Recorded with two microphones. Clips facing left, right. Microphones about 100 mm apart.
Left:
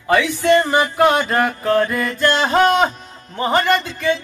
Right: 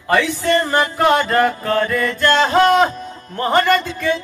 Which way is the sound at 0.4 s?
5° left (ahead or behind).